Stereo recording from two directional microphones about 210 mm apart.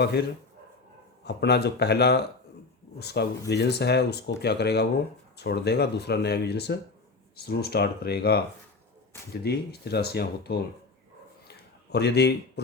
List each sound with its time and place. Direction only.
0.0 s speech: 50° left (ahead or behind)
9.4 s speech: 50° left (ahead or behind)
11.4 s a sound: 50° left (ahead or behind)